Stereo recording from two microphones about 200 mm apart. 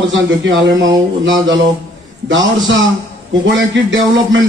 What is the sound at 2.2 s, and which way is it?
Speech, 70° right (ahead or behind).